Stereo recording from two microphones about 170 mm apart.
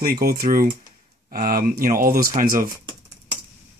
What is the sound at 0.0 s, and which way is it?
Speech, 60° right (ahead or behind).